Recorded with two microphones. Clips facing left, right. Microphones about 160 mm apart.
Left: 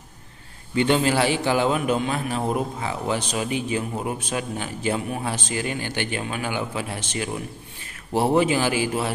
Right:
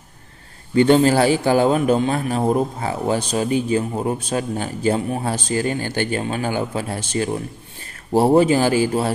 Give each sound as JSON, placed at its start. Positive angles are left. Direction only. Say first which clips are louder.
{"t": 0.7, "sound": "a man's voice", "louder": "right 6 dB", "side_deg": -40}